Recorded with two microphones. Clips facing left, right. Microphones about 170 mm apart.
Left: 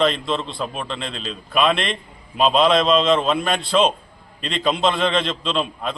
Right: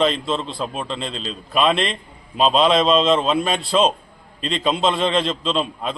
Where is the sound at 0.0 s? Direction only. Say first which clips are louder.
Even; centre (ahead or behind).